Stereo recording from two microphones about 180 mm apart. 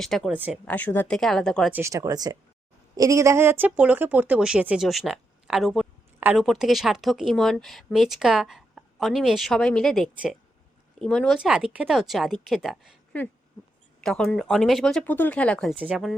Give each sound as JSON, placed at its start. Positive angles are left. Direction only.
{"t": 0.0, "sound": "speech", "side_deg": 0}
{"t": 0.3, "sound": "speech", "side_deg": -10}
{"t": 0.7, "sound": "speech", "side_deg": 10}
{"t": 1.7, "sound": "speech", "side_deg": -15}
{"t": 6.1, "sound": "speech", "side_deg": -10}
{"t": 14.0, "sound": "speech", "side_deg": 5}